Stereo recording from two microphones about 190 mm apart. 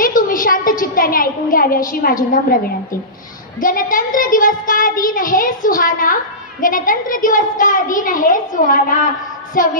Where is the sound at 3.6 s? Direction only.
45° left (ahead or behind).